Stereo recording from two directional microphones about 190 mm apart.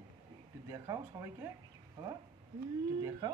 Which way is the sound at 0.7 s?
15° right (ahead or behind).